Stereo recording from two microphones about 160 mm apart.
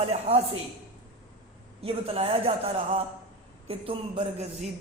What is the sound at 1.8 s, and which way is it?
A woman's voice, 35° right (ahead or behind).